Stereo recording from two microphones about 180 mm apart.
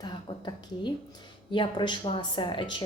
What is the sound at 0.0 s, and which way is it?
A woman's voice, 25° left (ahead or behind).